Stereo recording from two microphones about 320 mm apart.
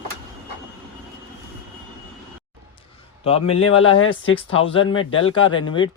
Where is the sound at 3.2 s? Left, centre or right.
Centre.